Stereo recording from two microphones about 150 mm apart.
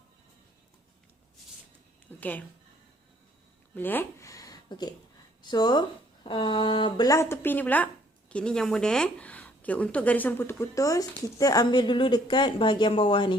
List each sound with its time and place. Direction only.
2.0 s a woman's voice: 10° left (ahead or behind)
3.8 s a woman's voice: 15° left (ahead or behind); by 13.3 s 35° left (ahead or behind)